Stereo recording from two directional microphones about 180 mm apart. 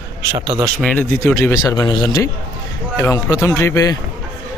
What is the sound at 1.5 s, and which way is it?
Speech, 20° left (ahead or behind).